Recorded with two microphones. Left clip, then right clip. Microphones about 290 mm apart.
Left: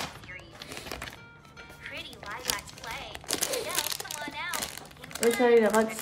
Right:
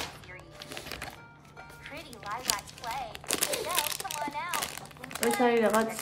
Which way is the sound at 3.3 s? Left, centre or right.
Centre.